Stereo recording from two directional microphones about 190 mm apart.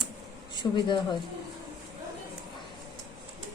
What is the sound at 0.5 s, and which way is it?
Speech, 25° left (ahead or behind).